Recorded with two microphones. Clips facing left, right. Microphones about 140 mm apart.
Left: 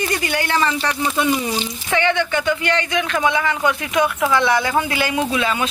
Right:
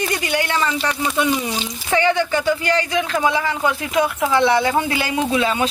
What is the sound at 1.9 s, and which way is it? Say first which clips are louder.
Speech: right 1 dB; 35° right (ahead or behind).